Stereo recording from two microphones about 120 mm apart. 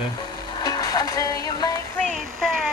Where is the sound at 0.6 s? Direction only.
35° left (ahead or behind).